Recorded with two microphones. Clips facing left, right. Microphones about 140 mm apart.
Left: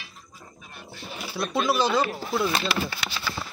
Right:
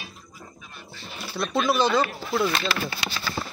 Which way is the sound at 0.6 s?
50° left (ahead or behind).